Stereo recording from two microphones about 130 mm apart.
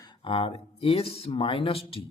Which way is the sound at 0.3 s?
45° left (ahead or behind).